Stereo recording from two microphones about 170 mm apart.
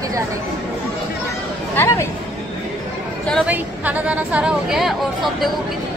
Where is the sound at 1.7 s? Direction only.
15° left (ahead or behind).